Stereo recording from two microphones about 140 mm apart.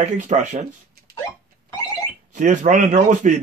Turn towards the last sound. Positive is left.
turn(degrees=-60)  # may be behind; listen again after turning